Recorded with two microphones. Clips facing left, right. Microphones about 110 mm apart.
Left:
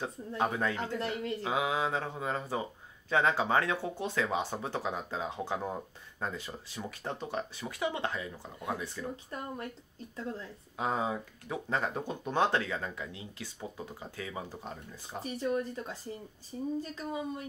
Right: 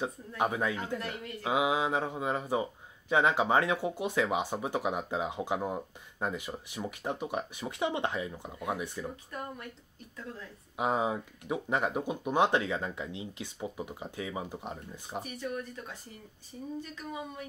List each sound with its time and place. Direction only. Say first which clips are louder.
0.4 s speech: right 1 dB; 15° right (ahead or behind)
0.7 s speech: left 2 dB; 30° left (ahead or behind)
1.4 s speech: right 4 dB; 15° right (ahead or behind)
9.1 s speech: left 1 dB; 30° left (ahead or behind)
10.8 s speech: right 2 dB; 20° right (ahead or behind)
15.2 s speech: left 9 dB; 30° left (ahead or behind)